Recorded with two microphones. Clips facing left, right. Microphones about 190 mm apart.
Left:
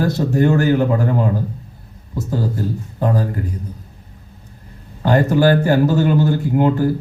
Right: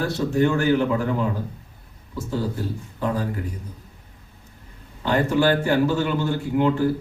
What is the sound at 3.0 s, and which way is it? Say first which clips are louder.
Speech: left 5 dB; 45° left (ahead or behind).